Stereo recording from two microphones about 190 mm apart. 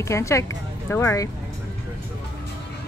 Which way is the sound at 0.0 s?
15° left (ahead or behind).